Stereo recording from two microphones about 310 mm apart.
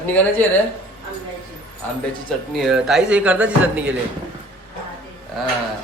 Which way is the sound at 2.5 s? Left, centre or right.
Centre.